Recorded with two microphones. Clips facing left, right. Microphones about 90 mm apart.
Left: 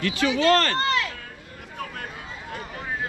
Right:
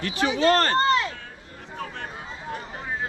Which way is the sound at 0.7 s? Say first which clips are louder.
Right 3 dB; 30° right (ahead or behind).